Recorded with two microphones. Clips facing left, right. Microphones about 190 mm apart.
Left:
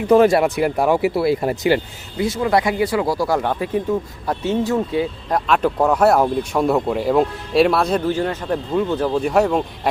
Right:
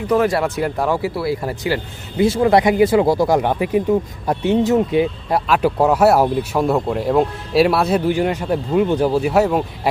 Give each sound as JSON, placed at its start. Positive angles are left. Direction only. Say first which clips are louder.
{"t": 0.1, "sound": "speech", "louder": "left 4 dB", "side_deg": 25}
{"t": 0.4, "sound": "speech", "louder": "left 2 dB", "side_deg": 15}
{"t": 2.1, "sound": "speech", "louder": "right 4 dB", "side_deg": -30}
{"t": 5.5, "sound": "speech", "louder": "right 1 dB", "side_deg": -5}